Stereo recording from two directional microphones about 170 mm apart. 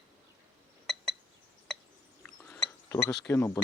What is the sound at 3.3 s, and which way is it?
Speech, 15° left (ahead or behind).